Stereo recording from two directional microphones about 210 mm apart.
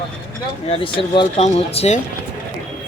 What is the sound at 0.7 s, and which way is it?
Speech, 25° left (ahead or behind).